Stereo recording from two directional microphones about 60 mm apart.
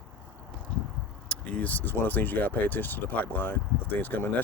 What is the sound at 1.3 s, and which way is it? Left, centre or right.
Speech, left.